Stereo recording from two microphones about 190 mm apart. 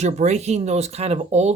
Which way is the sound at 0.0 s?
35° right (ahead or behind).